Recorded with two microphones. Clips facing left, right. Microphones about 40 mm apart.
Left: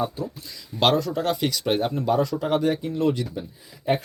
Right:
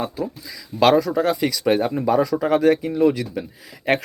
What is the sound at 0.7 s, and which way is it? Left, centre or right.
Speech, centre.